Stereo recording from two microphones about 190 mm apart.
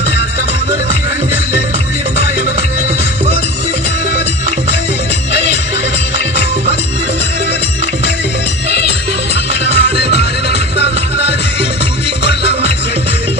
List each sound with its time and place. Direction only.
5.3 s music: 65° left (ahead or behind)
9.3 s music: 65° left (ahead or behind)
12.2 s music: 60° left (ahead or behind)